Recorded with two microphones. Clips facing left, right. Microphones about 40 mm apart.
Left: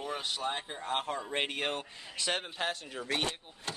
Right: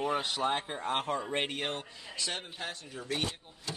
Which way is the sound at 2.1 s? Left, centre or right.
Left.